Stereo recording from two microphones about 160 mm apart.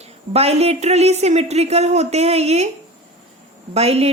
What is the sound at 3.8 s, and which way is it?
Speech, 40° right (ahead or behind).